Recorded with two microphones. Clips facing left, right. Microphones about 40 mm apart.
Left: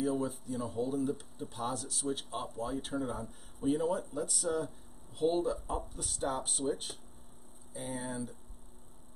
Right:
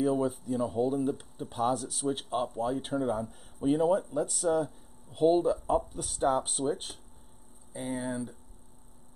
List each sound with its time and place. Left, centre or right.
0.0 s speech: centre
7.7 s speech: centre